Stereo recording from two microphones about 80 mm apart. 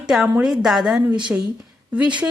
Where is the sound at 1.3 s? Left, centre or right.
Centre.